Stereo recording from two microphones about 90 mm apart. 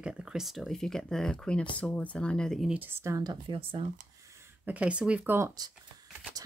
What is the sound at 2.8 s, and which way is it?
Speech, 30° right (ahead or behind).